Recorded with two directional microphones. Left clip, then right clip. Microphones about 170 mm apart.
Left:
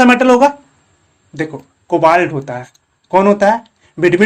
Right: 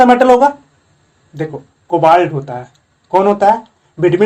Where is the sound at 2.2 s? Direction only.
25° left (ahead or behind).